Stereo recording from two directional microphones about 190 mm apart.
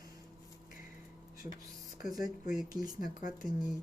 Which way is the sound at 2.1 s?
20° right (ahead or behind).